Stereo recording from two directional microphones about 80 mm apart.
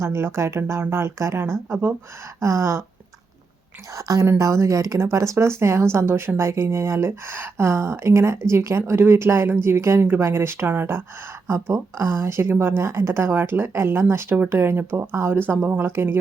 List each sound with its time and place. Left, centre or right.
0.0 s speech: right
3.9 s a woman's voice: right